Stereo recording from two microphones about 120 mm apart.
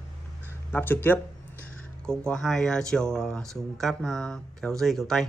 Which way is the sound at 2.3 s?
5° left (ahead or behind).